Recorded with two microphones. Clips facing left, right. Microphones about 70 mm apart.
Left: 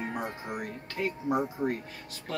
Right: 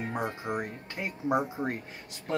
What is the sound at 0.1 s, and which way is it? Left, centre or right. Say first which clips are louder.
A man's voice: right 3 dB; right.